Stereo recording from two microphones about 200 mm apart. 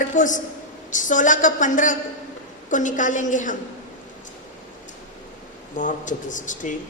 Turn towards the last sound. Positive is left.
turn(degrees=40)  # may be behind; listen again after turning